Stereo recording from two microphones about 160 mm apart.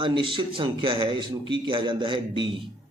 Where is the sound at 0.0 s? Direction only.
30° right (ahead or behind).